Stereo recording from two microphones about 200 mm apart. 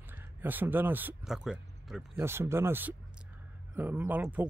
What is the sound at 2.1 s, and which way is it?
Speech, 15° right (ahead or behind).